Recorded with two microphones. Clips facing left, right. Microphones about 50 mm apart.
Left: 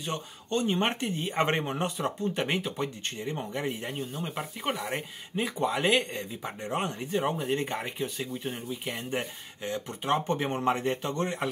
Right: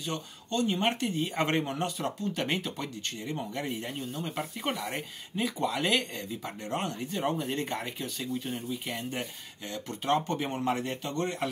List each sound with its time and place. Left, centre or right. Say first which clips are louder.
0.0 s speech: left 1 dB; left
3.2 s speech: left 2 dB; left
3.5 s speech: left 2 dB; centre
5.3 s speech: left 2 dB; left
6.9 s speech: left 2 dB; left
7.4 s speech: left 3 dB; centre